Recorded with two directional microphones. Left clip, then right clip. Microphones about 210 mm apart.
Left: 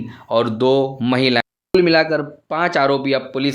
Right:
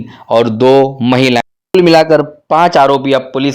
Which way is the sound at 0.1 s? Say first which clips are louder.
Right 8 dB; 30° right (ahead or behind).